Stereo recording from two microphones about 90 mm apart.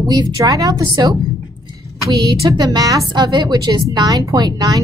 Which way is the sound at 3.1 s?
55° right (ahead or behind).